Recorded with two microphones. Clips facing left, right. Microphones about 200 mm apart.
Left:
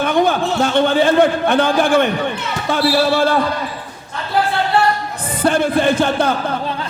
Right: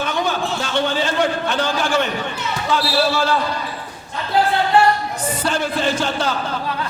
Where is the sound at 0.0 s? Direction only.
55° left (ahead or behind).